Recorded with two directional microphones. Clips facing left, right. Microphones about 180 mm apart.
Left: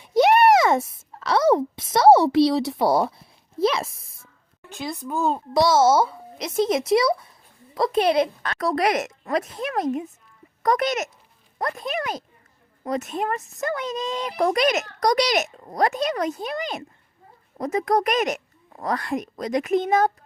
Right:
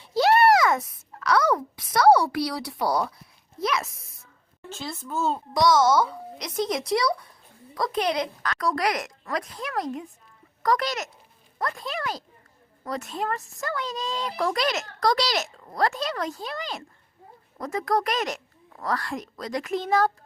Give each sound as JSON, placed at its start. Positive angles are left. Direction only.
{"t": 0.0, "sound": "a sound", "side_deg": 20}
{"t": 4.7, "sound": "speech", "side_deg": 15}
{"t": 5.5, "sound": "a child's voice", "side_deg": 25}